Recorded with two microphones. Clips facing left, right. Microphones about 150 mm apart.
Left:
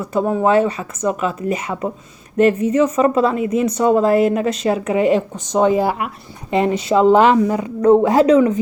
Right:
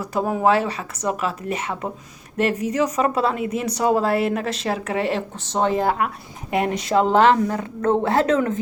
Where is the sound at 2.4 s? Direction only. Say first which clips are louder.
Left 7 dB; 5° right (ahead or behind).